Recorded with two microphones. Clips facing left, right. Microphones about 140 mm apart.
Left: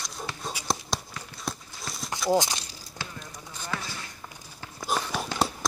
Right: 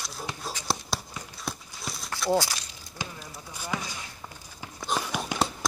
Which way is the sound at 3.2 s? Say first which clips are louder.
Even; 10° right (ahead or behind).